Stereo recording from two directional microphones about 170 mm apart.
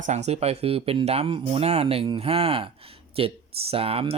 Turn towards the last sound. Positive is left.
turn(degrees=-35)  # may be behind; listen again after turning